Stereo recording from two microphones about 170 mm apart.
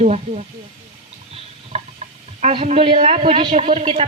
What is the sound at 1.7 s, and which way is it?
Stir, 40° right (ahead or behind).